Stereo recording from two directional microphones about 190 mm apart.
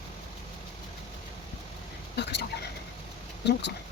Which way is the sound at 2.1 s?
60° left (ahead or behind).